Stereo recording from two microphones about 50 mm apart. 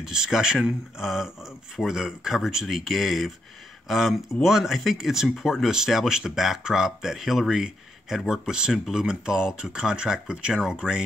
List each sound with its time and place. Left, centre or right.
0.0 s speech: centre
8.7 s speech: centre
9.0 s speech: centre
10.5 s speech: centre